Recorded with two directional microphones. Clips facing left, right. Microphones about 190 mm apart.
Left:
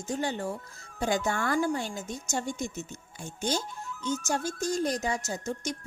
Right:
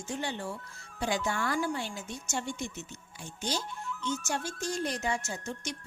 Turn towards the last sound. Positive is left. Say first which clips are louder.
# left 5 dB
turn(degrees=45)  # may be behind; listen again after turning